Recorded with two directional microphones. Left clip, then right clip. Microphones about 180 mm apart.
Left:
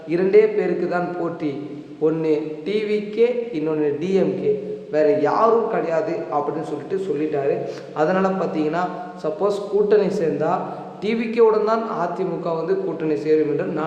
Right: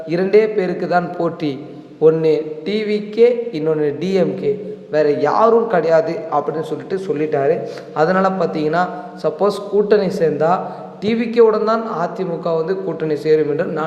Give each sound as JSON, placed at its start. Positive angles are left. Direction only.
{"t": 0.1, "sound": "a man's voice", "side_deg": -20}